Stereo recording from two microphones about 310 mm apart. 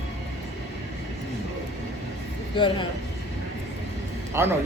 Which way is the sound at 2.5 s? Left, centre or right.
Centre.